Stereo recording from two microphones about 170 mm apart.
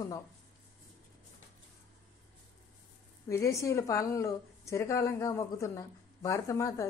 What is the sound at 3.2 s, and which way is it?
A woman's voice, 15° left (ahead or behind).